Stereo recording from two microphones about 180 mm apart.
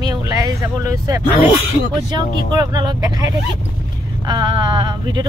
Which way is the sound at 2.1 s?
25° right (ahead or behind).